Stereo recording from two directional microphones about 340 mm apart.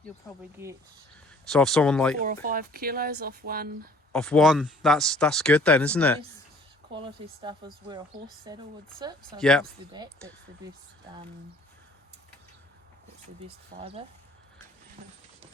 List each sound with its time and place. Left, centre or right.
0.6 s speech: centre
2.2 s speech: right
4.1 s speech: centre
7.0 s speech: centre
9.4 s speech: centre
13.7 s speech: centre